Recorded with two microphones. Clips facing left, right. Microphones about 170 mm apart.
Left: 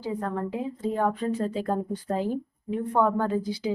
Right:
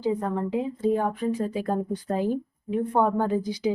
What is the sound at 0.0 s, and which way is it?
A woman's voice, 15° right (ahead or behind).